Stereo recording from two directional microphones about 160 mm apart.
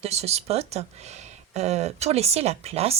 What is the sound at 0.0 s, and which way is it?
A woman's voice, 40° right (ahead or behind).